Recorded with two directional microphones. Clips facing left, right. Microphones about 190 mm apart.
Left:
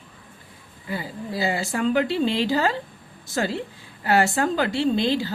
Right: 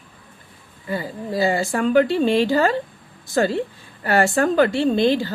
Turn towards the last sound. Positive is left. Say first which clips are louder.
# right 4 dB
turn(degrees=-50)  # may be behind; listen again after turning